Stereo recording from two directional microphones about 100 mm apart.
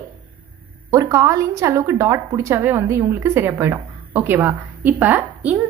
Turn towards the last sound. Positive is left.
turn(degrees=-15)  # may be behind; listen again after turning